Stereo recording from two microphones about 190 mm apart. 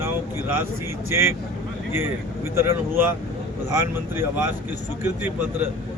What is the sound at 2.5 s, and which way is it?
Speech, 15° right (ahead or behind).